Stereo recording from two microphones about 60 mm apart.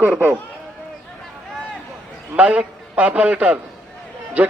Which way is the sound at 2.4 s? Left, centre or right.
Right.